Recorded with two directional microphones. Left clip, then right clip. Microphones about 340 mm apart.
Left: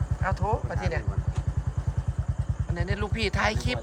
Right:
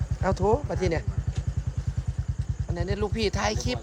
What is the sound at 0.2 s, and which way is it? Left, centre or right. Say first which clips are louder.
Speech: right 4 dB; right.